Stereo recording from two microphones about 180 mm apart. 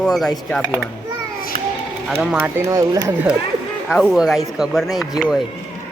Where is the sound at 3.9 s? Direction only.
Centre (ahead or behind).